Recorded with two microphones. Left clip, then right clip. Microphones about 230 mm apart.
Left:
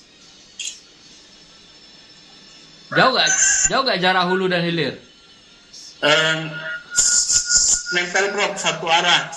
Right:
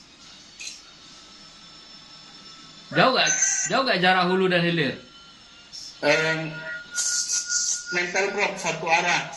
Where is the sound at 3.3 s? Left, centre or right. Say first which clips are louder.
Left 7 dB; left.